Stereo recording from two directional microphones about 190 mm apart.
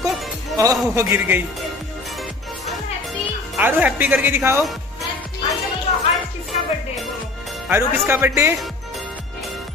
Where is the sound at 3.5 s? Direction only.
10° right (ahead or behind).